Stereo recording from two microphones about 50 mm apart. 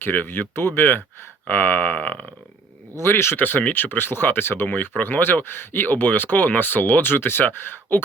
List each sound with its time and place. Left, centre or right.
0.0 s speech: left
2.9 s speech: left
3.4 s speech: left